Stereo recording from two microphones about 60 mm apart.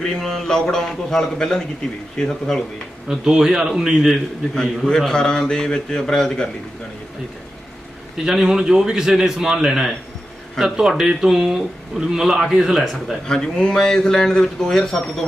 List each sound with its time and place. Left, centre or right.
0.0 s speech: centre
3.1 s a man's voice: centre
4.5 s speech: centre
8.2 s a man's voice: centre
13.2 s speech: centre